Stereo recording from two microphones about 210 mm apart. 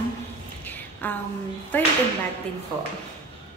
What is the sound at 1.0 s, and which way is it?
Speech, 10° left (ahead or behind).